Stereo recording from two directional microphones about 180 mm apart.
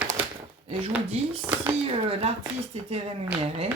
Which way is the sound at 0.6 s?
35° right (ahead or behind).